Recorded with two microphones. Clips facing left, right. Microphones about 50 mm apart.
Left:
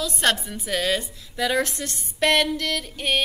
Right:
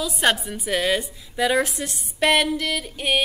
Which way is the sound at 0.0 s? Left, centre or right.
Centre.